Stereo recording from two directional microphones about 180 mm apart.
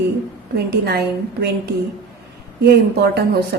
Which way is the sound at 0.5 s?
60° right (ahead or behind).